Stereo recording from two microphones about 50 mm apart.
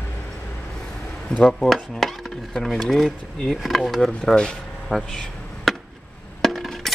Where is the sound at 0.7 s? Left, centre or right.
Centre.